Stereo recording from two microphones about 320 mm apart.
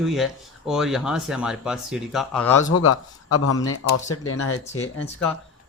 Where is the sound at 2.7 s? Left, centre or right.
Left.